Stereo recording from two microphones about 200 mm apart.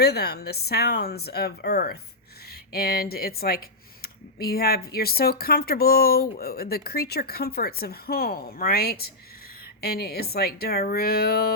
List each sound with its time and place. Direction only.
0.0 s speech: 50° left (ahead or behind)